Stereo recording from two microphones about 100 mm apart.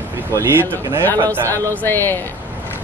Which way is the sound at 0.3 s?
25° right (ahead or behind).